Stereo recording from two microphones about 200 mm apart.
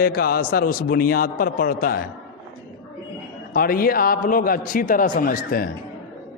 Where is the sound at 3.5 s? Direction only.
45° left (ahead or behind).